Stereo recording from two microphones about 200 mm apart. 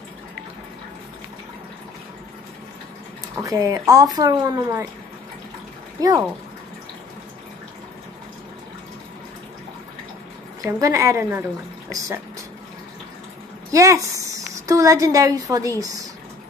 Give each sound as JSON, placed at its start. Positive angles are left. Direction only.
{"t": 3.3, "sound": "speech", "side_deg": -15}
{"t": 5.9, "sound": "speech", "side_deg": -15}
{"t": 10.6, "sound": "speech", "side_deg": -15}
{"t": 13.7, "sound": "a woman's voice", "side_deg": -15}